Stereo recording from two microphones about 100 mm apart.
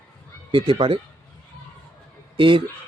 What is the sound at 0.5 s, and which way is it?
Speech, 60° right (ahead or behind).